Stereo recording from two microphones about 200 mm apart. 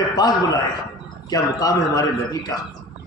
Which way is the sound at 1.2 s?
20° left (ahead or behind).